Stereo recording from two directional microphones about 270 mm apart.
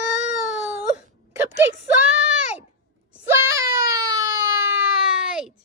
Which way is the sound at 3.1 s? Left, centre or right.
Centre.